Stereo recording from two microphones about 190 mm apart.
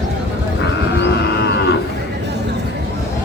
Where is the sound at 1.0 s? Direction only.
65° left (ahead or behind).